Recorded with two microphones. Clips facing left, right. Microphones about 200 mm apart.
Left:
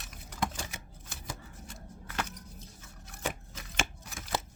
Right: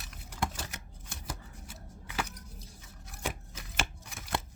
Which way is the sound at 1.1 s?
5° right (ahead or behind).